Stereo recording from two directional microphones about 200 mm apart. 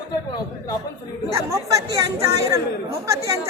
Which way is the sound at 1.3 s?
15° right (ahead or behind).